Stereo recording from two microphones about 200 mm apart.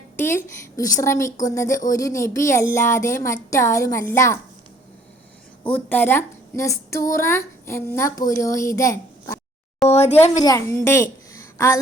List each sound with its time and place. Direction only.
0.2 s speech: 10° left (ahead or behind)
5.6 s speech: 10° left (ahead or behind)
9.9 s a sound: 30° left (ahead or behind)
10.3 s a woman's voice: 15° left (ahead or behind)